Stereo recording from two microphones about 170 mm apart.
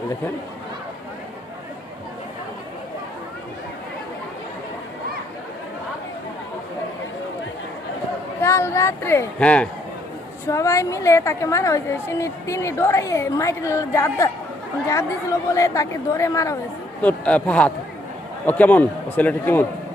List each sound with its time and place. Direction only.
8.4 s a woman's voice: 15° left (ahead or behind)